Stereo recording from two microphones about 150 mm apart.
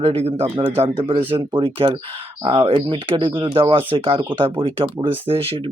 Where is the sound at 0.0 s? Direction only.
45° right (ahead or behind).